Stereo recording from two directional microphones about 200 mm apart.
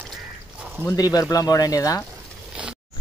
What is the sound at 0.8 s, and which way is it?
Speech, 20° left (ahead or behind).